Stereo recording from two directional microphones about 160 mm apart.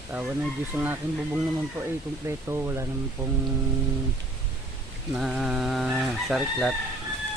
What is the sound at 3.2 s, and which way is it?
Music, 20° right (ahead or behind).